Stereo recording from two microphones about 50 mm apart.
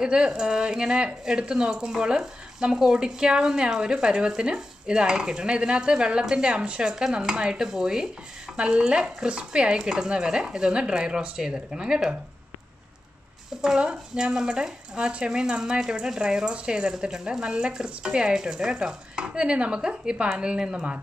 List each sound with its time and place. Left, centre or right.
0.0 s speech: centre
13.6 s speech: centre